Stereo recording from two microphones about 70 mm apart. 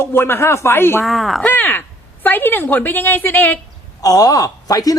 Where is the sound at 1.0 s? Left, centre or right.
Centre.